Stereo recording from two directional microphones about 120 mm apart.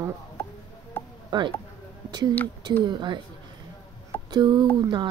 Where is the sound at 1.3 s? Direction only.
40° right (ahead or behind).